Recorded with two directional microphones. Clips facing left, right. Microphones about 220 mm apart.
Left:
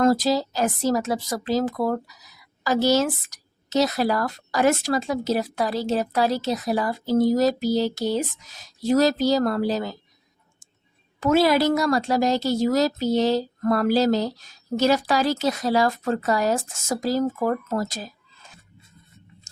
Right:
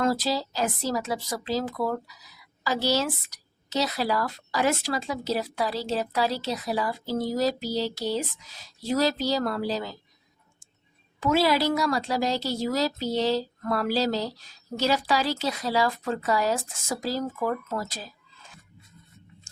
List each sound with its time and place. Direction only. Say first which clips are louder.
0.0 s a woman's voice: left 6 dB; 45° left (ahead or behind)
11.2 s a woman's voice: left 4 dB; 45° left (ahead or behind)